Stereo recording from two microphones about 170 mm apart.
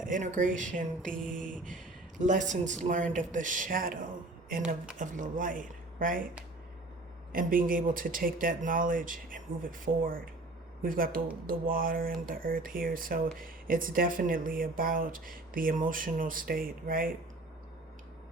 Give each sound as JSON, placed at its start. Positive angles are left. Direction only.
{"t": 0.1, "sound": "speech", "side_deg": -50}
{"t": 7.3, "sound": "speech", "side_deg": -55}